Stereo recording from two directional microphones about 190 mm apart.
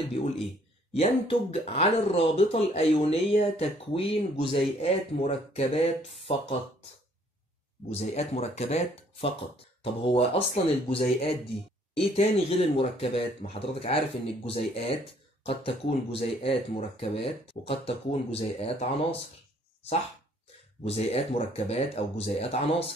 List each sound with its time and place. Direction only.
0.2 s speech: 40° left (ahead or behind)
7.9 s speech: 35° left (ahead or behind)
20.8 s speech: 30° left (ahead or behind)